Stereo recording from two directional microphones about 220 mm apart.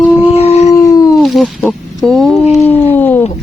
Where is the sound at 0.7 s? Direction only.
15° left (ahead or behind).